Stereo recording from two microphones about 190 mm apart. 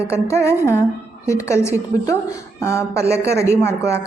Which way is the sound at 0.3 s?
15° left (ahead or behind).